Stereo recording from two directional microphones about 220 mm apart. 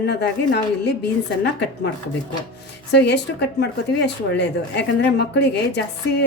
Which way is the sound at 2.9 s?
50° left (ahead or behind).